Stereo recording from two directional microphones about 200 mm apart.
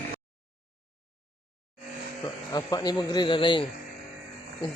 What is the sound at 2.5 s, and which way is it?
Speech, 20° left (ahead or behind).